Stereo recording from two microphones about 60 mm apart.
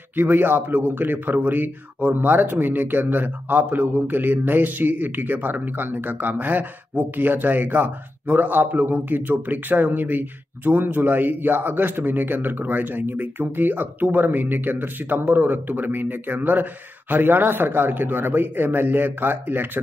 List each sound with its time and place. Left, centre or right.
0.1 s speech: right